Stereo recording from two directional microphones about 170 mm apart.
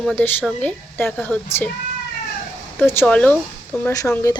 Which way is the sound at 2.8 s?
10° left (ahead or behind).